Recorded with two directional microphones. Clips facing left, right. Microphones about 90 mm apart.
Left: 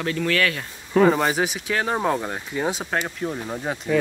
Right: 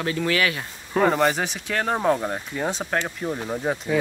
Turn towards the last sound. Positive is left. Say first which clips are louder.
# right 1 dB
turn(degrees=0)  # may be behind; listen again after turning